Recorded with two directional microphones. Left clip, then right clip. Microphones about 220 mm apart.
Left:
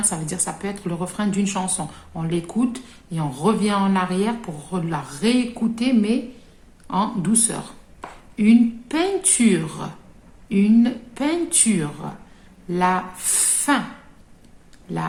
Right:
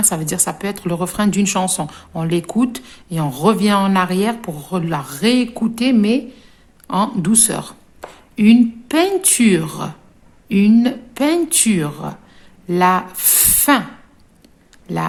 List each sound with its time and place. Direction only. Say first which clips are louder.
0.1 s a woman's voice: right 6 dB; 50° right (ahead or behind)
14.9 s a woman's voice: right 6 dB; 45° right (ahead or behind)